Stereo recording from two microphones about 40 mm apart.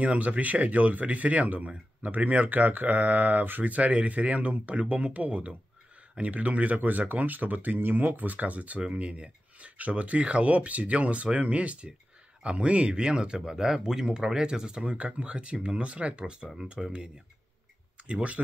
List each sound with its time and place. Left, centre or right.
0.0 s speech: right
3.7 s speech: right